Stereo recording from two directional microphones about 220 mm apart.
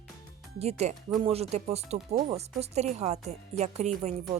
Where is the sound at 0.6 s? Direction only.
30° right (ahead or behind).